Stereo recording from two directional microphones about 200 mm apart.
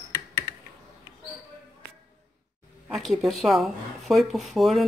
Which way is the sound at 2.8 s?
Centre (ahead or behind).